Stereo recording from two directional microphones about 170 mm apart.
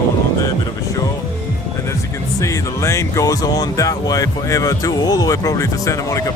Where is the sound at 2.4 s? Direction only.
20° left (ahead or behind).